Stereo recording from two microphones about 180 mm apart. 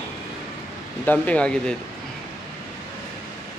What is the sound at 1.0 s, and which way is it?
Speech, 5° left (ahead or behind).